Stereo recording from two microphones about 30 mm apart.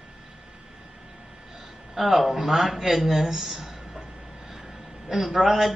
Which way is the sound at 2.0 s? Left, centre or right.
Centre.